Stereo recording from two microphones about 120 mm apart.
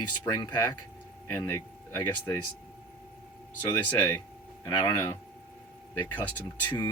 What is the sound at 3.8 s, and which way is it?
Speech, 15° left (ahead or behind).